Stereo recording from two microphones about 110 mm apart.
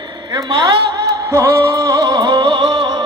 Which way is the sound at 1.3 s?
25° right (ahead or behind).